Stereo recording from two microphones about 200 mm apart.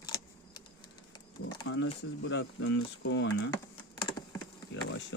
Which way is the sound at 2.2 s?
65° left (ahead or behind).